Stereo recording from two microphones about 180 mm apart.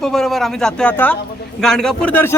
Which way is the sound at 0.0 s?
Centre (ahead or behind).